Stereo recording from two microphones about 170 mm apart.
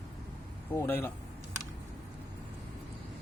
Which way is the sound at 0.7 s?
10° left (ahead or behind).